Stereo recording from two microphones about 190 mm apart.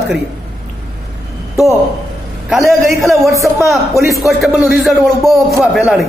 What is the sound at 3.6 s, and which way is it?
Speech, centre (ahead or behind).